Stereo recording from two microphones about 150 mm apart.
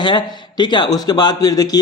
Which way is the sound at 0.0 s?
30° left (ahead or behind).